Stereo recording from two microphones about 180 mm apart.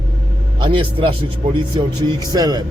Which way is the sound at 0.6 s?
30° right (ahead or behind).